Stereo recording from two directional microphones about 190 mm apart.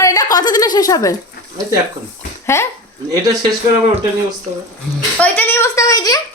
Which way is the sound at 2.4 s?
15° left (ahead or behind).